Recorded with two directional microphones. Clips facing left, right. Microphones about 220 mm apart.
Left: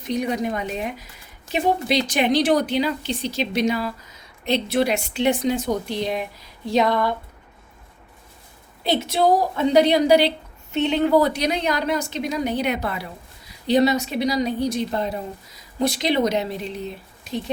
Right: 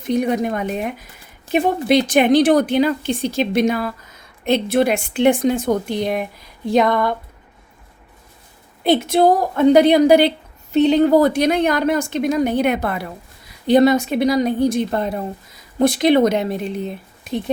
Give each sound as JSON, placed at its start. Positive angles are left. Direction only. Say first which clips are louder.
{"t": 0.1, "sound": "a woman's voice", "louder": "right 5 dB", "side_deg": -50}
{"t": 8.8, "sound": "a woman's voice", "louder": "right 6 dB", "side_deg": -50}
{"t": 10.7, "sound": "a woman's voice", "louder": "right 6 dB", "side_deg": -35}